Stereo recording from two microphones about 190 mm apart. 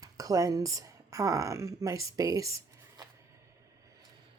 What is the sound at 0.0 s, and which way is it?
Speech, 20° right (ahead or behind).